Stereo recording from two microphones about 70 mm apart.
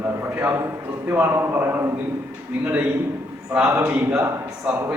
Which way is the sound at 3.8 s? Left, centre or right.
Right.